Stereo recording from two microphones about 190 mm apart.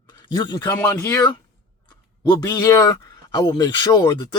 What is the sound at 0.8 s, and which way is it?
Speech, 10° left (ahead or behind).